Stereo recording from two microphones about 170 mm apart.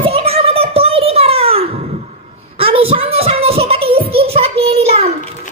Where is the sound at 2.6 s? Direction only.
35° right (ahead or behind).